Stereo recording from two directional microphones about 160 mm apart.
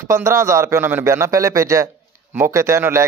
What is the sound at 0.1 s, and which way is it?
A man's voice, 15° right (ahead or behind).